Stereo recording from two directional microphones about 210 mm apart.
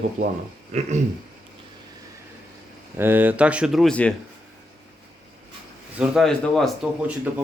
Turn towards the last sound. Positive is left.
turn(degrees=-5)  # may be behind; listen again after turning